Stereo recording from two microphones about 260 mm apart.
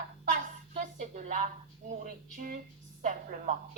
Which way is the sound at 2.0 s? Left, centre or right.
Right.